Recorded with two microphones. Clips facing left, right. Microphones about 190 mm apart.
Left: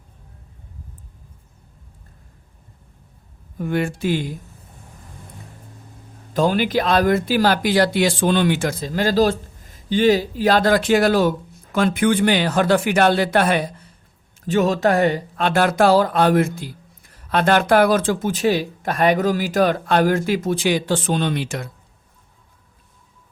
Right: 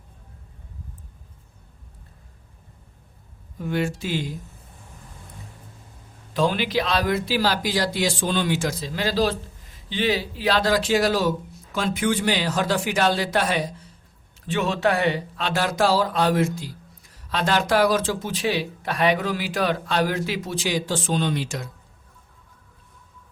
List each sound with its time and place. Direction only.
3.6 s speech: 55° left (ahead or behind)
6.3 s speech: 45° left (ahead or behind)
14.4 s speech: 40° left (ahead or behind); by 21.7 s 60° left (ahead or behind)